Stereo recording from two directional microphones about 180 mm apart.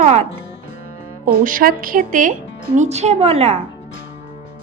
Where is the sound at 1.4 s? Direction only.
50° right (ahead or behind); by 3.5 s 35° right (ahead or behind).